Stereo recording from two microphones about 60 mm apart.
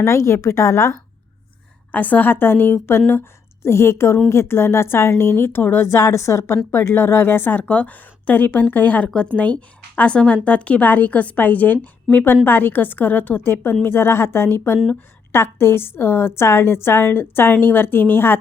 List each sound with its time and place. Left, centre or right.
0.0 s a woman's voice: left
1.9 s a woman's voice: left
6.7 s a woman's voice: left
7.6 s a woman's voice: left